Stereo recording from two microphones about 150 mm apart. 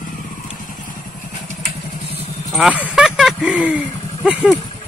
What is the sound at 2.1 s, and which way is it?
Vehicle, 45° left (ahead or behind).